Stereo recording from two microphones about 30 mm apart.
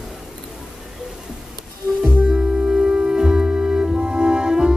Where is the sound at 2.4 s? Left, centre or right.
Right.